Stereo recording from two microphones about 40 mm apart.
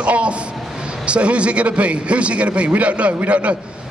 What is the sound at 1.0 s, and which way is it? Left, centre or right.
A man's voice, right.